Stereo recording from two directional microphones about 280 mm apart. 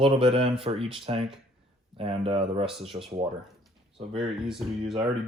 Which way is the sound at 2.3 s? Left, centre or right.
Centre.